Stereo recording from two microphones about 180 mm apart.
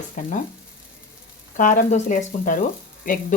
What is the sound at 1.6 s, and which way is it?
Speech, 45° left (ahead or behind).